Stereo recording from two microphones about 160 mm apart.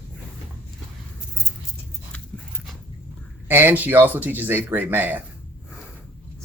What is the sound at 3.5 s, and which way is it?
Speech, 10° right (ahead or behind).